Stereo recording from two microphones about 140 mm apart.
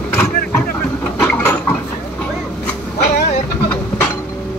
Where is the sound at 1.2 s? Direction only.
15° left (ahead or behind).